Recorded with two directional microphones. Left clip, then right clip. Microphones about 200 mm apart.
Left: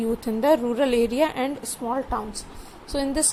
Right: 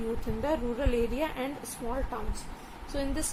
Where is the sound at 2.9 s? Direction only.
40° left (ahead or behind).